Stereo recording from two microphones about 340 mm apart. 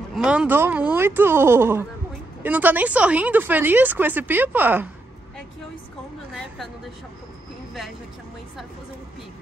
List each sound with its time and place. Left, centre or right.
0.1 s speech: centre
6.3 s speech: centre